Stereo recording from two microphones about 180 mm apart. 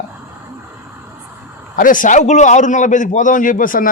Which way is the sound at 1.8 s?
50° left (ahead or behind).